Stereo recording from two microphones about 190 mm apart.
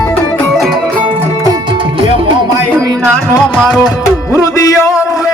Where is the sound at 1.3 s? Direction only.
20° right (ahead or behind).